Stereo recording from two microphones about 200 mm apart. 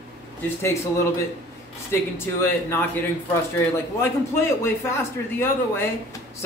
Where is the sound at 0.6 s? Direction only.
15° left (ahead or behind).